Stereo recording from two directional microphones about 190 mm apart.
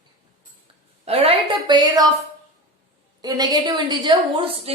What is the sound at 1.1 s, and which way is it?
A woman's voice, 30° right (ahead or behind).